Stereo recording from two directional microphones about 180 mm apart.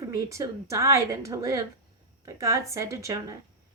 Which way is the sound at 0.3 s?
15° right (ahead or behind).